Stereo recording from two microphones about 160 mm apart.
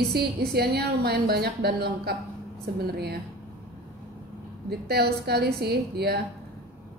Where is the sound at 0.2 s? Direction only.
90° right.